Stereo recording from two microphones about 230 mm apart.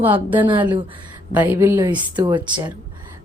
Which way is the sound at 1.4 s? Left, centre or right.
Centre.